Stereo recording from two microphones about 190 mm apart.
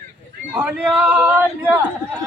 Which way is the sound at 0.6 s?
10° right (ahead or behind).